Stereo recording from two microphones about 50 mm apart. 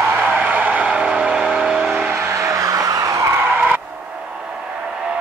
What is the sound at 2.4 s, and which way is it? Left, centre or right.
Vehicle, right.